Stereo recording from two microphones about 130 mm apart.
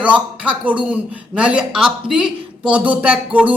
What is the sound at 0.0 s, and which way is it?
A man's voice, 10° right (ahead or behind).